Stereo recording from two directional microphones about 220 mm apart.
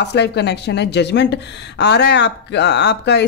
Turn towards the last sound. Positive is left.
turn(degrees=50)  # may be behind; listen again after turning